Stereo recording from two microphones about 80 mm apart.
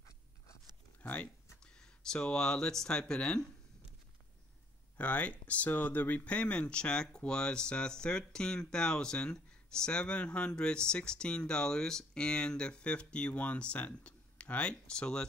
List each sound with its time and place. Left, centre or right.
1.0 s speech: centre
4.9 s speech: centre